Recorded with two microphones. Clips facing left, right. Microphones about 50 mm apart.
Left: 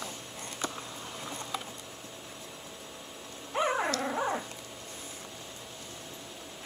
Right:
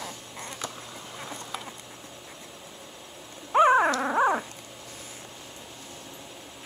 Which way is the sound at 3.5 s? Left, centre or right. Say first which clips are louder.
Right 10 dB; right.